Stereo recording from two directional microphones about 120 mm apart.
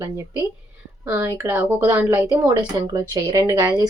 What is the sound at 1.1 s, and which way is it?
A woman's voice, 20° right (ahead or behind).